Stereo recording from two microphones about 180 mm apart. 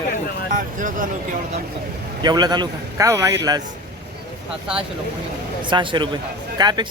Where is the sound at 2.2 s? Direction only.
25° right (ahead or behind).